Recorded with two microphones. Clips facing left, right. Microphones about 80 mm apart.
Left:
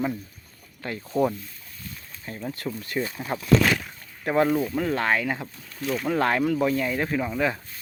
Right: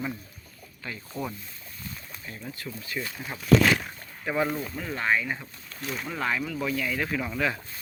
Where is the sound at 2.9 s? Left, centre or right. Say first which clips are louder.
Left 6 dB; left.